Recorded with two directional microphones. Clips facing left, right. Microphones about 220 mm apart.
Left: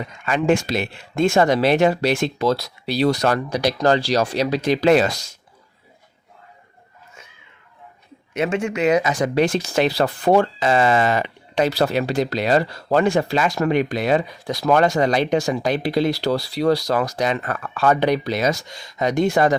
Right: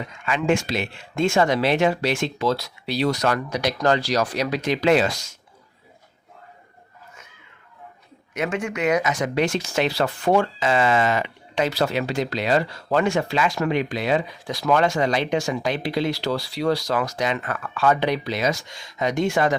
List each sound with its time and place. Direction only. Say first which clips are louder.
0.3 s speech: left 3 dB; 35° left (ahead or behind)
8.3 s speech: left 4 dB; 25° left (ahead or behind)